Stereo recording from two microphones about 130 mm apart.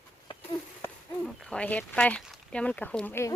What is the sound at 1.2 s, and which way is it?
Speech, 5° left (ahead or behind).